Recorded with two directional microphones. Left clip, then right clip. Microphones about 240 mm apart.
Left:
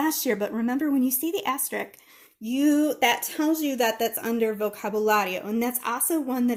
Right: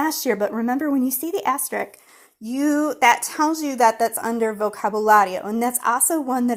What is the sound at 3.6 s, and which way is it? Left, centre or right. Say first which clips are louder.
Speech: right 7 dB; right.